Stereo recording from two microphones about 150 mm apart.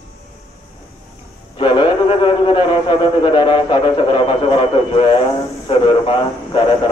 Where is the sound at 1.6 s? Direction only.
35° left (ahead or behind).